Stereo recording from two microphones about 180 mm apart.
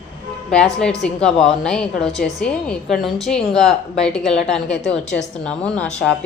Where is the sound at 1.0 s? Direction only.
5° left (ahead or behind).